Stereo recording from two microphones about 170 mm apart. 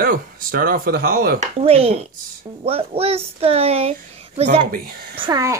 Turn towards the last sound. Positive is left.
turn(degrees=-30)  # may be behind; listen again after turning